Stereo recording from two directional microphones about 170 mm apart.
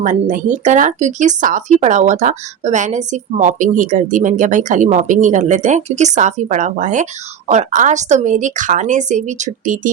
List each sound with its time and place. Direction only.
0.0 s a woman's voice: 50° right (ahead or behind)